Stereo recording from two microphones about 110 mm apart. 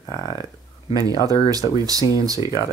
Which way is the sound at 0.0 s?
35° left (ahead or behind).